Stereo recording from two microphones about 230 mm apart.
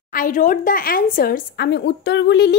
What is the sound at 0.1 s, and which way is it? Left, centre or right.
Speech, left.